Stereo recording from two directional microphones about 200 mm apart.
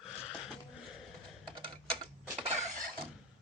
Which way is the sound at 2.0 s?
30° right (ahead or behind).